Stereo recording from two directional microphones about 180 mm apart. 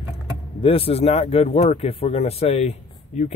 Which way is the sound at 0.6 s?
30° left (ahead or behind).